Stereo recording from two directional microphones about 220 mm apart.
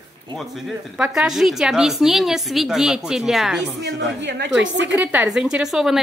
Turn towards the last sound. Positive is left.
turn(degrees=0)  # may be behind; listen again after turning